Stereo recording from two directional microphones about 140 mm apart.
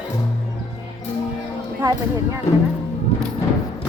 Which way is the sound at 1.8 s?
25° right (ahead or behind).